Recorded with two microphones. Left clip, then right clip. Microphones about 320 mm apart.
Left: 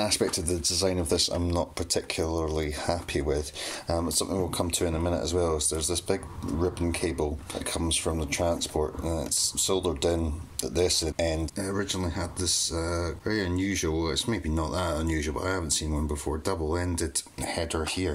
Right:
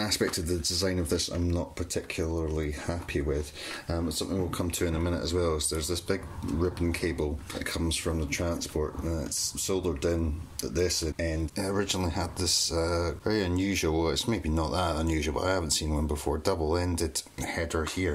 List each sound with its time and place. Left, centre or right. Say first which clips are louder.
0.0 s speech: left 2 dB; centre
11.5 s speech: right 1 dB; centre